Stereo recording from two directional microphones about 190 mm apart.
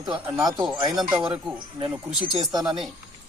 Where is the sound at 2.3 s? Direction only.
20° right (ahead or behind).